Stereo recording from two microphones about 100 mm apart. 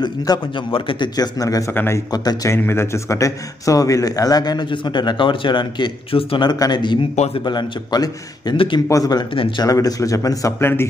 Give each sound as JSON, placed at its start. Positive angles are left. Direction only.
{"t": 0.3, "sound": "a man's voice", "side_deg": 40}
{"t": 0.7, "sound": "a man's voice", "side_deg": 60}
{"t": 1.7, "sound": "speech", "side_deg": 20}
{"t": 2.0, "sound": "a man's voice", "side_deg": 40}
{"t": 2.5, "sound": "a man's voice", "side_deg": 25}
{"t": 8.5, "sound": "speech", "side_deg": 55}
{"t": 8.8, "sound": "a man's voice", "side_deg": 35}